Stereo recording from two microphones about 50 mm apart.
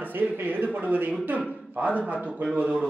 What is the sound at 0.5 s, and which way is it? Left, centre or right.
Speech, right.